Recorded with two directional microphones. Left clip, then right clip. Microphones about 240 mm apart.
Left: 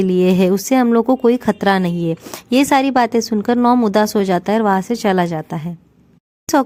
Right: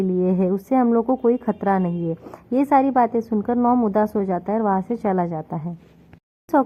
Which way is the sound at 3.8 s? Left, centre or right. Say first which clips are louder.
Left 6 dB; left.